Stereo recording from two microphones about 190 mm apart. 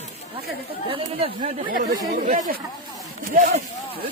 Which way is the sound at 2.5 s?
50° right (ahead or behind).